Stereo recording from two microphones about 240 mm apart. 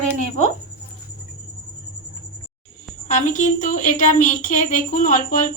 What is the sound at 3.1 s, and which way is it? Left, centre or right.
Speech, left.